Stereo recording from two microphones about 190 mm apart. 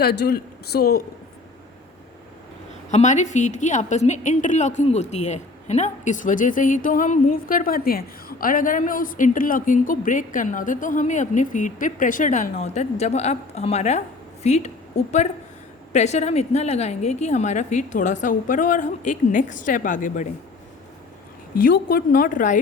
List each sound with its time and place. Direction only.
0.0 s speech: 55° left (ahead or behind)
2.9 s a woman's voice: 40° left (ahead or behind)
21.5 s a woman's voice: 50° left (ahead or behind)